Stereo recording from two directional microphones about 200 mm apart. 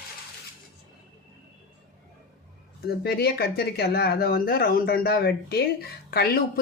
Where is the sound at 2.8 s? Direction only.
50° left (ahead or behind).